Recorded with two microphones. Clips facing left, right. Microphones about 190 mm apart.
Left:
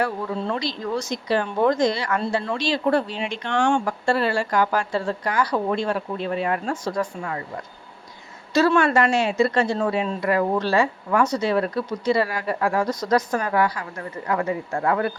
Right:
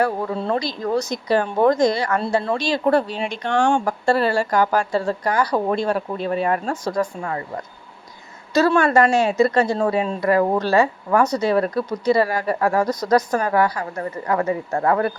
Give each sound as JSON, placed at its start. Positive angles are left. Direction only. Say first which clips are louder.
{"t": 0.0, "sound": "speech", "louder": "right 3 dB", "side_deg": -40}
{"t": 8.5, "sound": "speech", "louder": "right 2 dB", "side_deg": -40}